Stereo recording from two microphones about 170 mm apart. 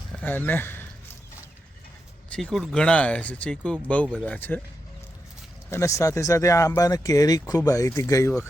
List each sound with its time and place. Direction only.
0.2 s speech: 10° left (ahead or behind)
2.3 s speech: centre (ahead or behind)
5.7 s speech: 15° left (ahead or behind)